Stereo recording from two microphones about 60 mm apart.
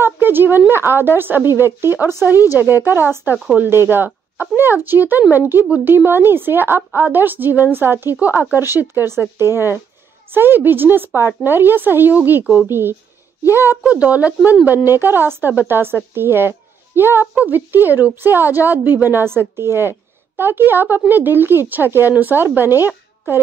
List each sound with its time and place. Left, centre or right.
0.0 s a woman's voice: right
13.8 s speech: right
14.9 s a woman's voice: right